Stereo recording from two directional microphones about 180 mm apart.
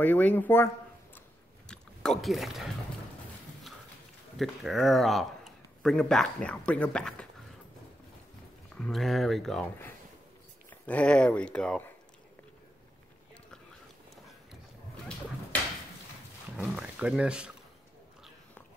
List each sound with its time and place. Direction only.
0.0 s speech: 10° left (ahead or behind)
1.7 s speech: centre (ahead or behind)
4.4 s a man's voice: centre (ahead or behind)
8.7 s a man's voice: 5° left (ahead or behind)
16.5 s a man's voice: 5° right (ahead or behind)